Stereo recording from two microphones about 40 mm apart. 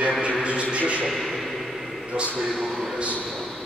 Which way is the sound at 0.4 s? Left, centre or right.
Right.